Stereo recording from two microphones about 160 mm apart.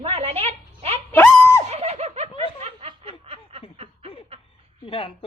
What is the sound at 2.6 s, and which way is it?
Snicker, 40° right (ahead or behind).